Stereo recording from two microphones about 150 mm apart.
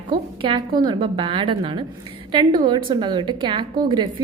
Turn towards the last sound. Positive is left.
turn(degrees=-30)  # may be behind; listen again after turning